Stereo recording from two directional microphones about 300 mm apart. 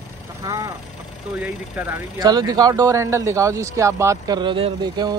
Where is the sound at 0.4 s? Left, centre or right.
Centre.